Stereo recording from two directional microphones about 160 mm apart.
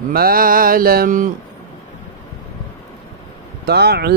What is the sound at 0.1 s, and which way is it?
Mantra, 65° right (ahead or behind).